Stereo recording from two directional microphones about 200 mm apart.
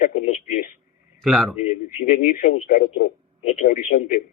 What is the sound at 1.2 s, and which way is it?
Speech, centre (ahead or behind).